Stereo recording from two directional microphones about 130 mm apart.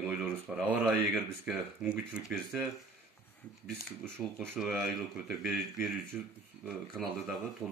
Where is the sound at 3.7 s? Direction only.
15° right (ahead or behind).